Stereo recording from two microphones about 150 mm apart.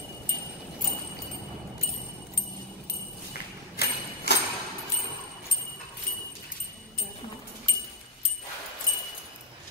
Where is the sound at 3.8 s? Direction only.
90° left.